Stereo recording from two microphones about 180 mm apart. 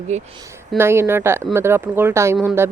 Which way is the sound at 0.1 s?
40° right (ahead or behind).